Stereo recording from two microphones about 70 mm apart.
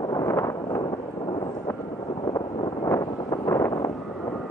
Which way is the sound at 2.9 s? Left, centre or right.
Left.